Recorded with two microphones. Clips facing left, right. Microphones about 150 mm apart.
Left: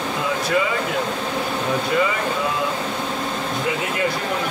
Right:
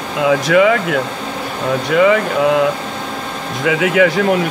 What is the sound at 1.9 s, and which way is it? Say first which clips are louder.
Speech: right 12 dB; 80° right.